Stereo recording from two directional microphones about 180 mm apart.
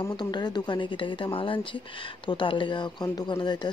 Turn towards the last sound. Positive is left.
turn(degrees=25)  # may be behind; listen again after turning